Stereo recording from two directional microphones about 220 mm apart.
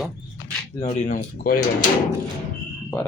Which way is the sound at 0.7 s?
30° left (ahead or behind).